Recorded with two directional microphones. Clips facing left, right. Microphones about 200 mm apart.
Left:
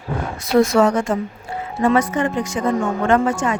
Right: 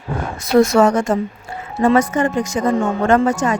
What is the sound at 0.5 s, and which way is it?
A woman's voice, 45° right (ahead or behind).